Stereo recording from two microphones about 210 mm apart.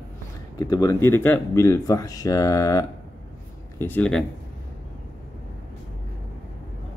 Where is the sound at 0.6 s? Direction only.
15° left (ahead or behind).